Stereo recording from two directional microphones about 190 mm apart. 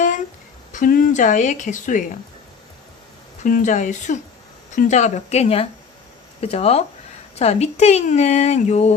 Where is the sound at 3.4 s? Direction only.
40° left (ahead or behind).